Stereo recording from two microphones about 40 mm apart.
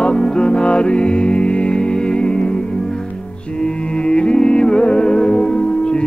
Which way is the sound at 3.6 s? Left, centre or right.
Left.